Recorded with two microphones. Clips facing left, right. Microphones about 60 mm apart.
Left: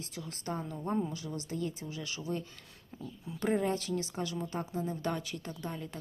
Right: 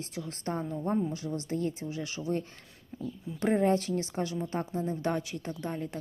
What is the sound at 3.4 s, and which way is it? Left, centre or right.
Speech, right.